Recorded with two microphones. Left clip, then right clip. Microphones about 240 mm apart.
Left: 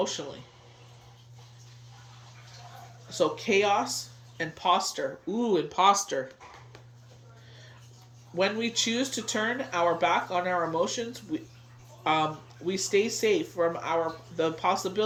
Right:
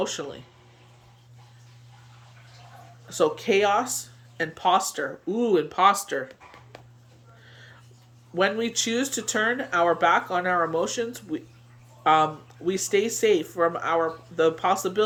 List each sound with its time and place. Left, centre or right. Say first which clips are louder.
0.0 s speech: right 2 dB; centre
3.1 s speech: right 4 dB; centre
8.4 s speech: right 3 dB; centre